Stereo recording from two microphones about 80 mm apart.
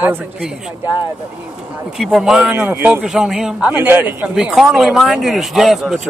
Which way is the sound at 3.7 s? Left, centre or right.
Right.